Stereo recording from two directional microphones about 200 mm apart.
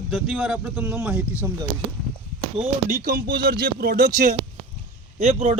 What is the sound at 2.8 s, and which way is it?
Speech, 45° right (ahead or behind).